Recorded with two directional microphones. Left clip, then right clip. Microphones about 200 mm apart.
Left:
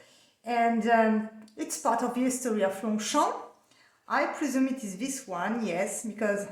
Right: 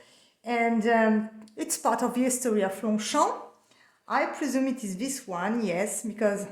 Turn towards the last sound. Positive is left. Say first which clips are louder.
# right 2 dB
turn(degrees=-35)  # may be behind; listen again after turning